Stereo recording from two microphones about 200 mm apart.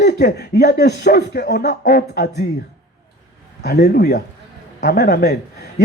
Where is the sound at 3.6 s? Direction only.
55° left (ahead or behind).